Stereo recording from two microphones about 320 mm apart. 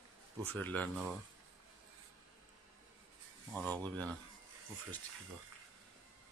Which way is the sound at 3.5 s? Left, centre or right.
Centre.